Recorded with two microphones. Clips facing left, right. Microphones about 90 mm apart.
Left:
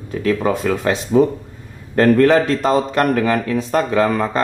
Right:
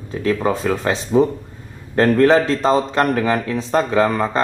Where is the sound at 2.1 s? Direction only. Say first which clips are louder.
Right 1 dB; 25° right (ahead or behind).